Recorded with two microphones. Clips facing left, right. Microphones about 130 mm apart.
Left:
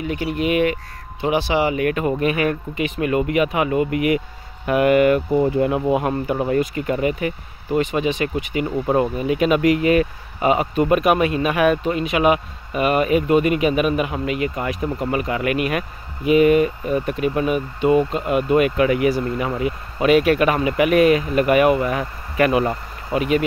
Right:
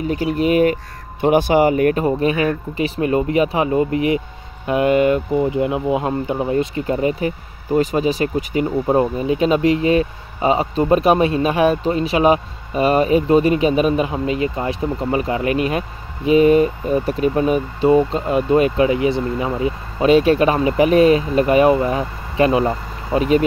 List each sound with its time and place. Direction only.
0.0 s speech: 40° right (ahead or behind)
1.2 s speech: 50° right (ahead or behind)
2.0 s speech: 30° right (ahead or behind)
8.6 s speech: 20° right (ahead or behind)